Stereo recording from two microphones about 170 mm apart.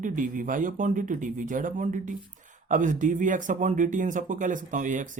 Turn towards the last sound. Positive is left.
turn(degrees=-50)  # may be behind; listen again after turning